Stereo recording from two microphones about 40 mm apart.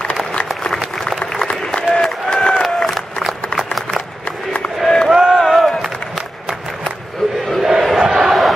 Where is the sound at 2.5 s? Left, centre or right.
Centre.